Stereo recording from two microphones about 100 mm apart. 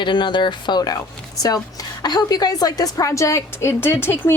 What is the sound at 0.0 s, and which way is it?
A woman's voice, 50° left (ahead or behind).